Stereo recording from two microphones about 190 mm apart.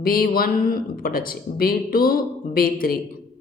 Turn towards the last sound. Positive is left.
turn(degrees=50)  # may be behind; listen again after turning